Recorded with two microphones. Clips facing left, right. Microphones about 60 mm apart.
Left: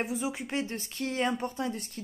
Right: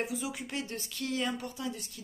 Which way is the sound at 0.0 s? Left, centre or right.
Left.